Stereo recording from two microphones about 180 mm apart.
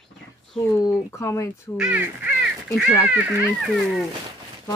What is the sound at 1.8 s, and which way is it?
Speech, 5° right (ahead or behind).